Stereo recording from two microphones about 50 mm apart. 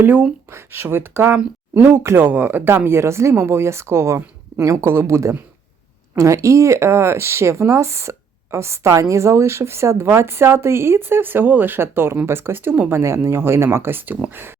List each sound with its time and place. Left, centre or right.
0.0 s speech: right
0.5 s speech: right
6.1 s speech: right
12.9 s speech: right